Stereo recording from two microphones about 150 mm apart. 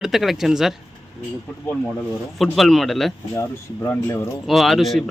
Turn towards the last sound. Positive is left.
turn(degrees=0)  # may be behind; listen again after turning